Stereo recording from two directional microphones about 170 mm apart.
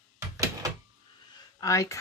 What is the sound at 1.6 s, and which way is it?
Speech, 20° left (ahead or behind).